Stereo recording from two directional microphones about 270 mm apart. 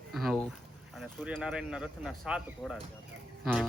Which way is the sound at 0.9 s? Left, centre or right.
Centre.